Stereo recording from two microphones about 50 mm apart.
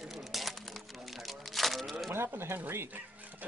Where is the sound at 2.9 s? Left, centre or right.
Right.